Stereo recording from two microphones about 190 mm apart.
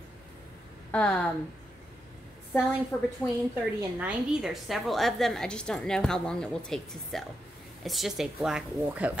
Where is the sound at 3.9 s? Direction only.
5° right (ahead or behind).